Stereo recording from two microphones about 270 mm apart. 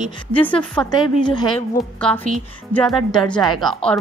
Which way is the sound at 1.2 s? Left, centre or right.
Centre.